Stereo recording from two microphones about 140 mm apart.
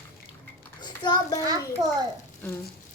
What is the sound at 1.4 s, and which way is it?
Speech, 25° right (ahead or behind).